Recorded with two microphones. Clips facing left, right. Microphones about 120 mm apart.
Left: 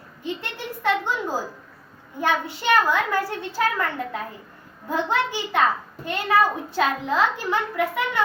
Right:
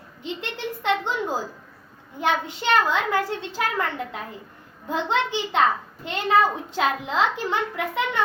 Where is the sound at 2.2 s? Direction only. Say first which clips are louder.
Left 1 dB; 20° right (ahead or behind).